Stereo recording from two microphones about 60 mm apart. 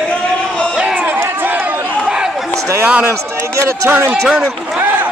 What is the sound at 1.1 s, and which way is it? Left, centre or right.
Run, right.